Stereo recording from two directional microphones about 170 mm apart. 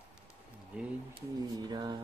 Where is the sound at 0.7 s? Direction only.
5° right (ahead or behind).